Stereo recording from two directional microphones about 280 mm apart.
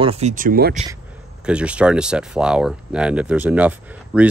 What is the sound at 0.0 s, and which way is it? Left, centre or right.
Speech, right.